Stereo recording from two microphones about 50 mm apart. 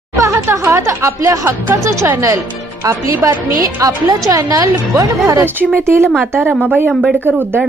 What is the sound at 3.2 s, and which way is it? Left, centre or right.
A woman's voice, right.